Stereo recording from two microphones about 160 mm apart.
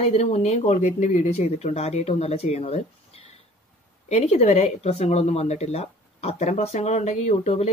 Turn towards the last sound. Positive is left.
turn(degrees=45)  # may be behind; listen again after turning